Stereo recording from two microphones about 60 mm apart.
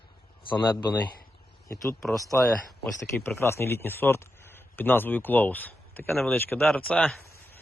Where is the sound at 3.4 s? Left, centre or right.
Left.